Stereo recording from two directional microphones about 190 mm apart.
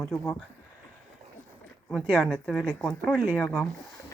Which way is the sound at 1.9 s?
5° left (ahead or behind).